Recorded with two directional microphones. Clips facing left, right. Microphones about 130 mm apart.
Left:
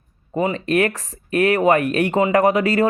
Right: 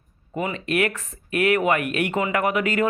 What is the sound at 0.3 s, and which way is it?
Speech, 35° left (ahead or behind).